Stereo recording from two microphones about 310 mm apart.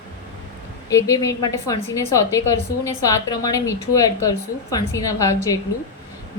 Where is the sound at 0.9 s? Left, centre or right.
Centre.